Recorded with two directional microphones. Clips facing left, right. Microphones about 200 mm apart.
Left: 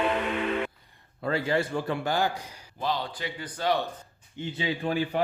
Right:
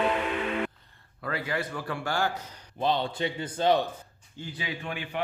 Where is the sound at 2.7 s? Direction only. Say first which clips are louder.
Right 3 dB; 25° right (ahead or behind).